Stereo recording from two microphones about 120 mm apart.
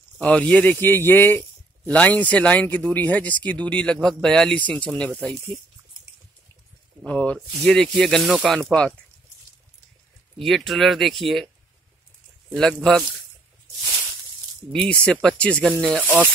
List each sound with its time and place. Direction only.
0.2 s speech: 10° left (ahead or behind)
7.1 s speech: 10° left (ahead or behind)
10.4 s speech: centre (ahead or behind)
12.5 s speech: 5° left (ahead or behind)
14.7 s speech: 10° left (ahead or behind)
16.0 s speech: 15° right (ahead or behind)